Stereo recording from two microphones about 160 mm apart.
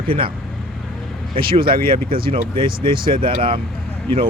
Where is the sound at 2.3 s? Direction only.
35° right (ahead or behind).